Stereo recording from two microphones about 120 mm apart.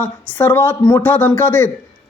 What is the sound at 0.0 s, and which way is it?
Speech, 15° left (ahead or behind).